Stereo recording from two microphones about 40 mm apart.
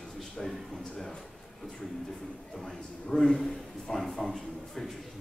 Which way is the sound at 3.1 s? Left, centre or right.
Centre.